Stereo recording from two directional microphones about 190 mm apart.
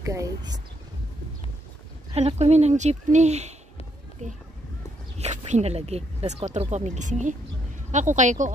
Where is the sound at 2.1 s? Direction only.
35° right (ahead or behind).